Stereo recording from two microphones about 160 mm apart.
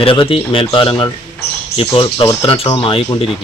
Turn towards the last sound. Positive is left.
turn(degrees=35)  # may be behind; listen again after turning